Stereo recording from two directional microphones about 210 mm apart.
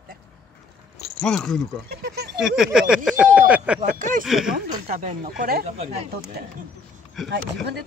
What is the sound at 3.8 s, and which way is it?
Speech, 35° right (ahead or behind).